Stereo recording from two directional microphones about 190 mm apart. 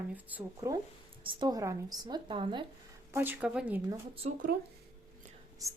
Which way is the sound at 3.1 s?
10° right (ahead or behind).